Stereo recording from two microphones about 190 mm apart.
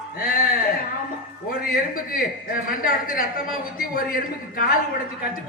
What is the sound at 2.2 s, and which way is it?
A man's voice, 50° left (ahead or behind).